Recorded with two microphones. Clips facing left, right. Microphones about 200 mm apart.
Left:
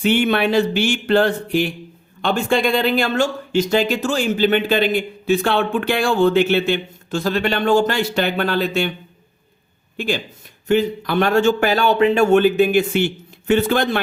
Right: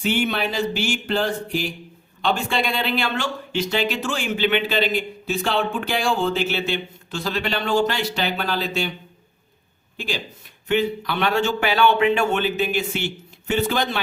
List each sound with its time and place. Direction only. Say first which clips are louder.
0.0 s speech: left 6 dB; 65° left (ahead or behind)
2.2 s speech: left 5 dB; 50° left (ahead or behind)
10.7 s speech: left 4 dB; 45° left (ahead or behind)